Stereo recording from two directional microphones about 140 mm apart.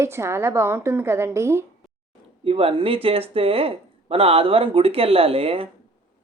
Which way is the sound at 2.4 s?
40° right (ahead or behind).